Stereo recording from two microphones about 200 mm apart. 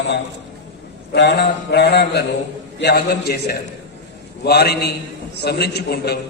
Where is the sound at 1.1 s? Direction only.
55° left (ahead or behind).